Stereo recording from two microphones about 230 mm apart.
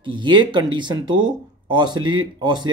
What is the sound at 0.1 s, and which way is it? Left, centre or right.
Speech, centre.